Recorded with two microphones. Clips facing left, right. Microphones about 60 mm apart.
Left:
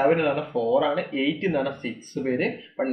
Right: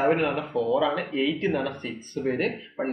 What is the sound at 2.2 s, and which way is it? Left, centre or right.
Speech, centre.